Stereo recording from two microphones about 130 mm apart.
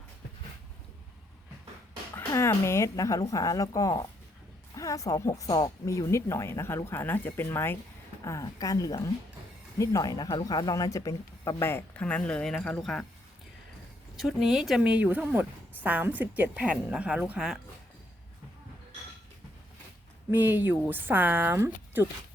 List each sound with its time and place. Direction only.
2.1 s speech: 25° left (ahead or behind); by 13.1 s 5° left (ahead or behind)
14.2 s a woman's voice: centre (ahead or behind)
20.3 s a woman's voice: 15° right (ahead or behind)